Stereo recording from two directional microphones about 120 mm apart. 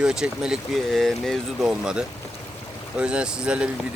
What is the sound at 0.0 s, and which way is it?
Speech, 5° right (ahead or behind).